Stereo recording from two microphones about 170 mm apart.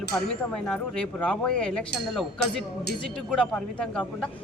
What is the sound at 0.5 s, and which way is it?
A man's voice, 5° left (ahead or behind).